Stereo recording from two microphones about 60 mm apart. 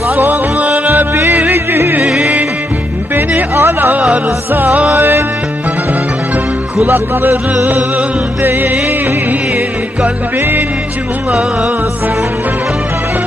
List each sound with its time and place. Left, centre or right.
0.2 s music: right
2.0 s music: centre
3.2 s a sound: right
4.5 s music: right
6.8 s music: right
11.3 s music: centre